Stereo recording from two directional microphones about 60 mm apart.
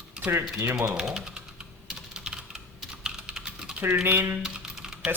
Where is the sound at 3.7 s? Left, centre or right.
Right.